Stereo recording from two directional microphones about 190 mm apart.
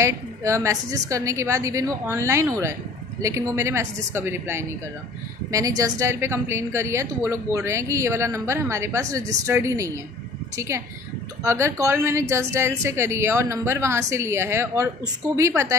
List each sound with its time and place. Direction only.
0.0 s a woman's voice: 15° right (ahead or behind)